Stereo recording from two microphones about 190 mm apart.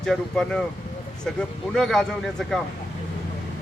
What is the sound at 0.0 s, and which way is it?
Speech, 5° left (ahead or behind).